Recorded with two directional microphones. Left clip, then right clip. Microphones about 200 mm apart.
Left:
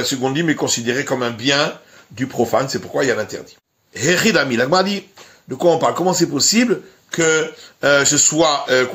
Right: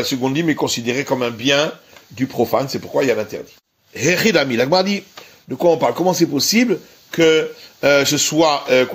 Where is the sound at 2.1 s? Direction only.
15° right (ahead or behind).